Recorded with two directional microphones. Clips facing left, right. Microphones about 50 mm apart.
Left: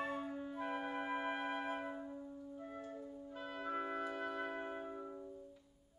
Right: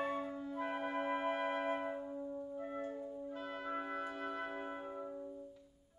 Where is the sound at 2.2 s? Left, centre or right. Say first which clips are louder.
Right 6 dB; right.